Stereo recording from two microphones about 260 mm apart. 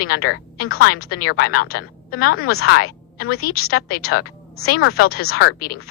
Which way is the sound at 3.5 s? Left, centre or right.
Left.